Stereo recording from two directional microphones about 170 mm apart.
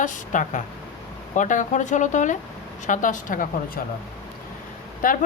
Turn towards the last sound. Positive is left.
turn(degrees=50)  # may be behind; listen again after turning